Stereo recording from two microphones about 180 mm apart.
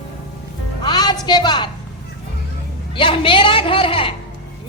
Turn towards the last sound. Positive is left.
turn(degrees=30)  # may be behind; listen again after turning